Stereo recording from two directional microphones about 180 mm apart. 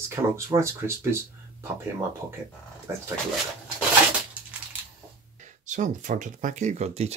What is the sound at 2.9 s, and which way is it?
Speech, 15° right (ahead or behind).